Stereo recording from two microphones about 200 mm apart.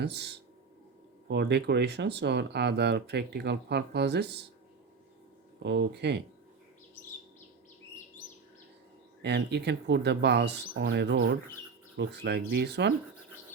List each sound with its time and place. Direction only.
0.0 s speech: 55° right (ahead or behind)
1.3 s speech: 60° right (ahead or behind)
5.5 s speech: 60° right (ahead or behind)
9.2 s speech: 55° right (ahead or behind)